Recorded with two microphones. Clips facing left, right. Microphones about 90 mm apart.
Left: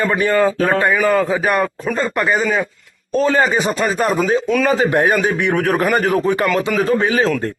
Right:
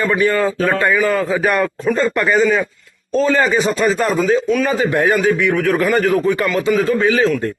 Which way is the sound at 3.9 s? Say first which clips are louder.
Even; 35° left (ahead or behind).